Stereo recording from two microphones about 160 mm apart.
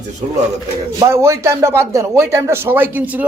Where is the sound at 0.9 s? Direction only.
15° right (ahead or behind).